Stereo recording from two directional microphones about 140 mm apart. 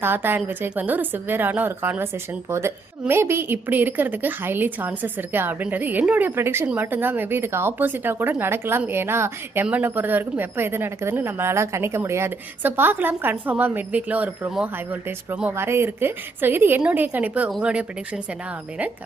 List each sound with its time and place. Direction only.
0.0 s a woman's voice: 15° right (ahead or behind)